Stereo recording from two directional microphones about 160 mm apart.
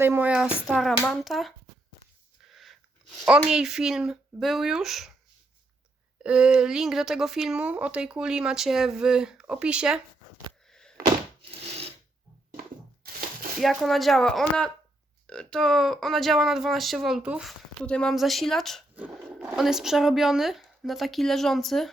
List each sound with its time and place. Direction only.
0.0 s speech: 15° right (ahead or behind)
2.5 s a sound: centre (ahead or behind)
3.2 s speech: 5° right (ahead or behind)
6.2 s speech: 5° right (ahead or behind)
10.7 s a sound: 5° left (ahead or behind)
11.5 s filing: 40° right (ahead or behind)
13.6 s speech: centre (ahead or behind)